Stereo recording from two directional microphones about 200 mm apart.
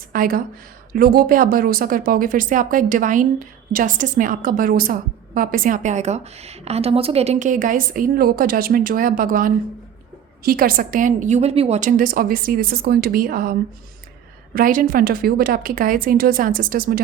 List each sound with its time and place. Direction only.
0.1 s speech: 45° right (ahead or behind)